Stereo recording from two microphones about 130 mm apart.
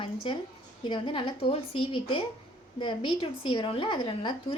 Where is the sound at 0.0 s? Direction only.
40° left (ahead or behind).